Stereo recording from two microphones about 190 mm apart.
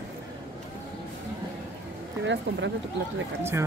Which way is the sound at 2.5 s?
60° right (ahead or behind).